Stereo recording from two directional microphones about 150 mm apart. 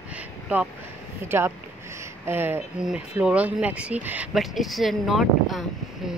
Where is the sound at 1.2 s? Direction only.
15° right (ahead or behind).